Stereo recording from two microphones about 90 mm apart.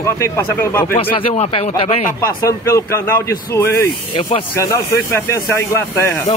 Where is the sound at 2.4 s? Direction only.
35° left (ahead or behind).